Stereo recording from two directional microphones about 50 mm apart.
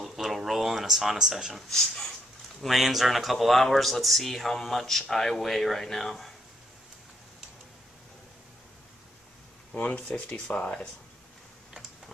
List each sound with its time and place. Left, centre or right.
0.0 s a sound: centre
1.7 s speech: centre
9.8 s speech: left